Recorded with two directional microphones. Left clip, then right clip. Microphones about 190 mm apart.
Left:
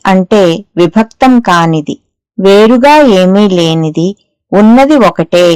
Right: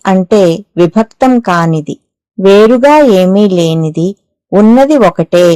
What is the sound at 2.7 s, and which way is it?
A woman's voice, 30° right (ahead or behind).